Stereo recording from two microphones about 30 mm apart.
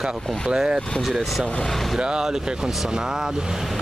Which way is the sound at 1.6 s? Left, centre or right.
Centre.